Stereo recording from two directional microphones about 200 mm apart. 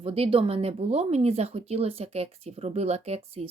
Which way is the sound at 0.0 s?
30° right (ahead or behind).